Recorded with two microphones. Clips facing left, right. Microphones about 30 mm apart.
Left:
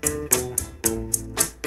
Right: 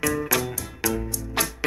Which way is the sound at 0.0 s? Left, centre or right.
Right.